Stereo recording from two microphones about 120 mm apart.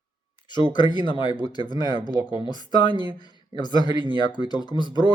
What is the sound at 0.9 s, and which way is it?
Speech, 40° left (ahead or behind).